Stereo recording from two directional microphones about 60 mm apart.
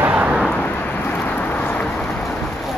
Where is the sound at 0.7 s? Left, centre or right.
Left.